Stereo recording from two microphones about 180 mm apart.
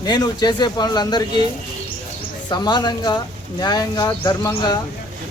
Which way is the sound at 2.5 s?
25° left (ahead or behind).